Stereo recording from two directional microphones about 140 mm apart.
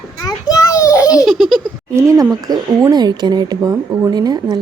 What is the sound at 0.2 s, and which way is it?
Children playing, 25° left (ahead or behind).